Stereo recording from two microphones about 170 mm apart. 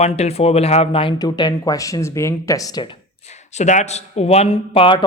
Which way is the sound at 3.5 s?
45° left (ahead or behind).